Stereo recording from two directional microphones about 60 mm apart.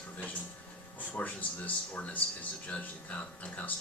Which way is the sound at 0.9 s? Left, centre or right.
Left.